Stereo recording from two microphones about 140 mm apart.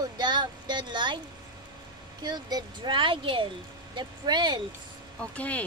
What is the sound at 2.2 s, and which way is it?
Speech, 30° right (ahead or behind).